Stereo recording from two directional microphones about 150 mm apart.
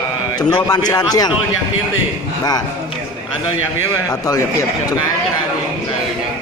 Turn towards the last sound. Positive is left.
turn(degrees=20)  # may be behind; listen again after turning